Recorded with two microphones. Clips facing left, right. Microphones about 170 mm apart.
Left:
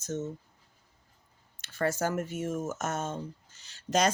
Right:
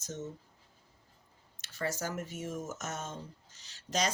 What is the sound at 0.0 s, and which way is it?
Speech, 50° left (ahead or behind).